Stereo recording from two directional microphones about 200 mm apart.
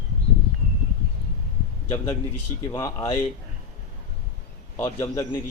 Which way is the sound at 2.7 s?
20° left (ahead or behind).